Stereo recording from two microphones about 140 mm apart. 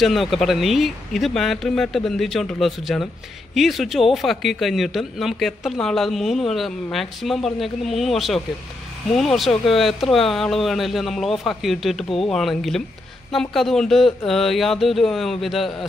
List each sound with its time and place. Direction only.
0.0 s speech: centre (ahead or behind)